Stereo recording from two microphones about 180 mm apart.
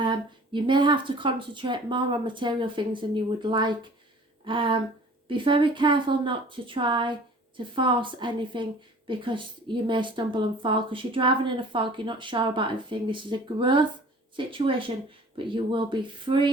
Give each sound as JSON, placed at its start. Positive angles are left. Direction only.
{"t": 0.0, "sound": "a woman's voice", "side_deg": -25}